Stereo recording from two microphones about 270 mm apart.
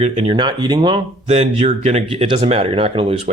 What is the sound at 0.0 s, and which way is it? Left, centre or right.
Speech, right.